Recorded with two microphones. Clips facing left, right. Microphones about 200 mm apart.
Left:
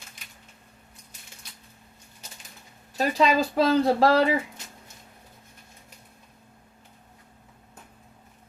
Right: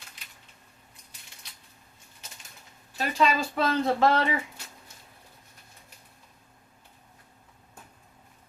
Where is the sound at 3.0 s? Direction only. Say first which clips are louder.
Left 4 dB; 40° left (ahead or behind).